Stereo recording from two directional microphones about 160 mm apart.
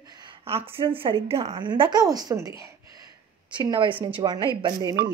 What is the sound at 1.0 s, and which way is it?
Speech, 35° right (ahead or behind).